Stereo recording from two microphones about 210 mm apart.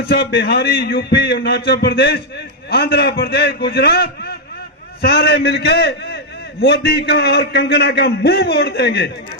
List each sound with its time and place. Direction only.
0.0 s a man's voice: 50° left (ahead or behind)